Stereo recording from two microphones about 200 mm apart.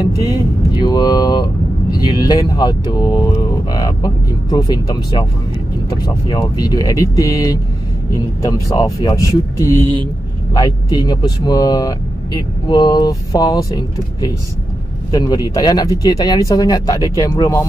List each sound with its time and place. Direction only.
0.2 s speech: 20° left (ahead or behind)